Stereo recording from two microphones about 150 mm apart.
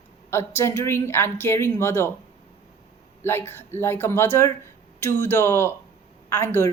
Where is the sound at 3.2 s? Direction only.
15° left (ahead or behind).